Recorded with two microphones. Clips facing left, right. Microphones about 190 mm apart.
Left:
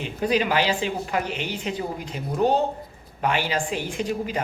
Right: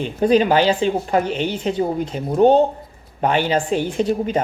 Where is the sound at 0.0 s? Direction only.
35° right (ahead or behind).